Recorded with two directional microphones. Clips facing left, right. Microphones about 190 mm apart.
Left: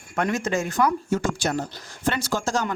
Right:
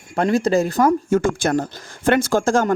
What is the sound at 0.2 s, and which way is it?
Speech, 35° right (ahead or behind).